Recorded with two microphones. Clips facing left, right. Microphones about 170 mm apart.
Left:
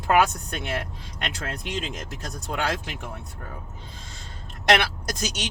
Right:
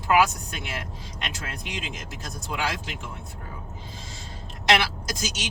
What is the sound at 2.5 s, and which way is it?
Speech, 55° left (ahead or behind).